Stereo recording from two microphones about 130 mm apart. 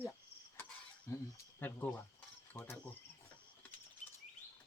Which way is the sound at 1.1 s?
20° left (ahead or behind).